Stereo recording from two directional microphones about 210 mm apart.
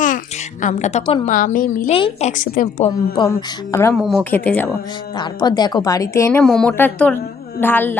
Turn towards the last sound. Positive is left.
turn(degrees=10)  # may be behind; listen again after turning